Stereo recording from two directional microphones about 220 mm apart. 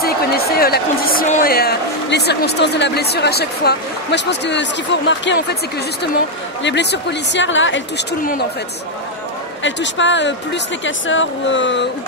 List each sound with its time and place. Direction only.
0.0 s speech: 45° left (ahead or behind)
6.6 s speech: 50° left (ahead or behind)
8.2 s speech: 40° left (ahead or behind)
9.6 s speech: 55° left (ahead or behind)